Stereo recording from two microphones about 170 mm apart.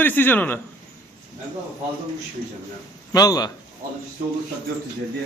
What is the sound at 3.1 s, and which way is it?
Speech, 20° left (ahead or behind).